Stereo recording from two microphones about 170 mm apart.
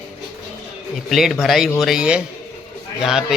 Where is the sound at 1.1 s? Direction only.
Centre (ahead or behind).